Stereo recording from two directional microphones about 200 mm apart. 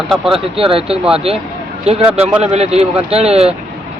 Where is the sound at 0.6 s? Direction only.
30° right (ahead or behind).